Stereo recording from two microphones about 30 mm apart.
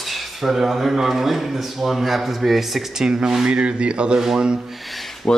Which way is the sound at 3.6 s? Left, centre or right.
Right.